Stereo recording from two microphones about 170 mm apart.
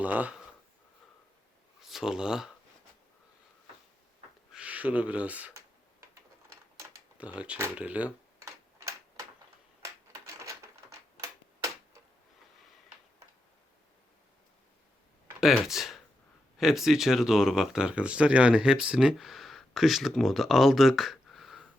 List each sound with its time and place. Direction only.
0.0 s speech: 10° right (ahead or behind)
1.8 s speech: centre (ahead or behind)
4.5 s speech: 10° right (ahead or behind)
6.7 s typing: 10° right (ahead or behind)
10.4 s a sound: 20° right (ahead or behind)
15.4 s speech: centre (ahead or behind)